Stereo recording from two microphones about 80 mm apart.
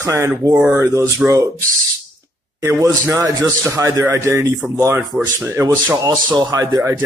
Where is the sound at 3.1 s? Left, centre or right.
Right.